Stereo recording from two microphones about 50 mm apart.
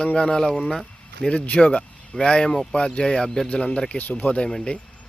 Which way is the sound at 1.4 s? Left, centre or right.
Left.